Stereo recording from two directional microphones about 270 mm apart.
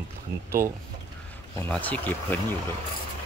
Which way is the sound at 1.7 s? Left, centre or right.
Centre.